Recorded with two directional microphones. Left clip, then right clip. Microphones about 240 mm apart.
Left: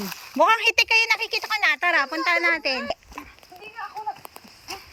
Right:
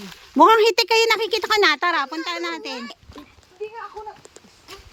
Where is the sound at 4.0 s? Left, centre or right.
Left.